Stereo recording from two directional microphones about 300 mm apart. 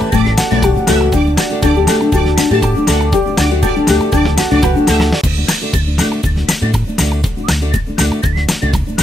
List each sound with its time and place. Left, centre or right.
0.4 s music: centre
8.0 s music: centre